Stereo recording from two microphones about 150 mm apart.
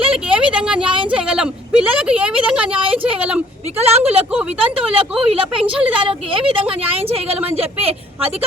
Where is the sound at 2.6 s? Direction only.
35° right (ahead or behind).